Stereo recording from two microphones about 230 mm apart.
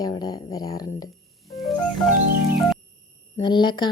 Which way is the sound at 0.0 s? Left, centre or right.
Centre.